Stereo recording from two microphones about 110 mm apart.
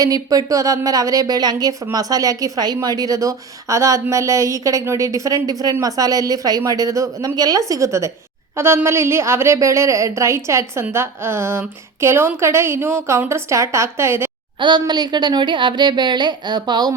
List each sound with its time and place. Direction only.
0.0 s a woman's voice: 35° right (ahead or behind)
14.6 s a woman's voice: 40° right (ahead or behind)